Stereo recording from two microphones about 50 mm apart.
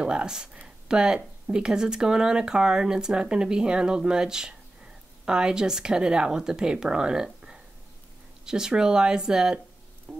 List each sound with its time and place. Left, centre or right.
0.0 s speech: centre
8.5 s speech: centre
10.1 s a sound: centre